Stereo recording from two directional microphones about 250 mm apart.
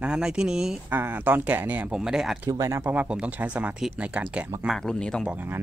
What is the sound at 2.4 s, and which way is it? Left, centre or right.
Speech, centre.